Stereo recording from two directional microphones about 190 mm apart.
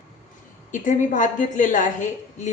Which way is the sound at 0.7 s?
40° left (ahead or behind).